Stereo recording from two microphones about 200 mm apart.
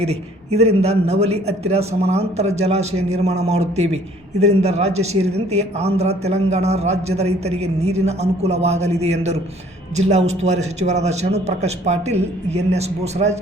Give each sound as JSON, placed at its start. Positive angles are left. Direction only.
{"t": 0.0, "sound": "a man's voice", "side_deg": -30}